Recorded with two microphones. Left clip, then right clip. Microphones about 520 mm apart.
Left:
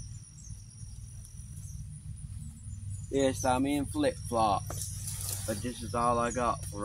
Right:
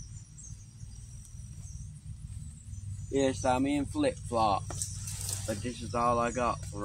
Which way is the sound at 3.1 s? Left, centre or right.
Left.